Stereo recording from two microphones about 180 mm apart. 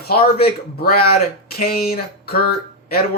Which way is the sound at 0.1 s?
60° left (ahead or behind).